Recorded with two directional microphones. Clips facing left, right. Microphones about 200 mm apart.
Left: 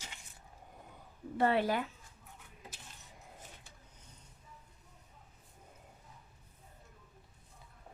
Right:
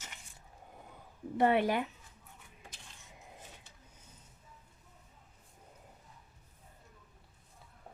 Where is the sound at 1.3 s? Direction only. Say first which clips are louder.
Right 2 dB; 20° right (ahead or behind).